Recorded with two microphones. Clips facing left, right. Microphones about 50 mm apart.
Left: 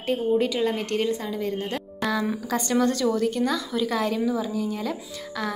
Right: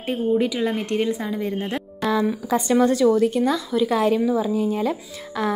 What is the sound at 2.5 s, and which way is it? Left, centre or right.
A woman's voice, centre.